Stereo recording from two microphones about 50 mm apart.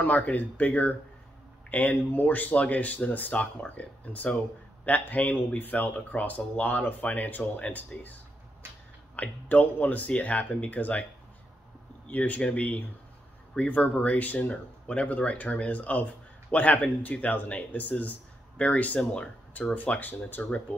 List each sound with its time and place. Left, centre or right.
0.0 s speech: left
12.1 s a man's voice: left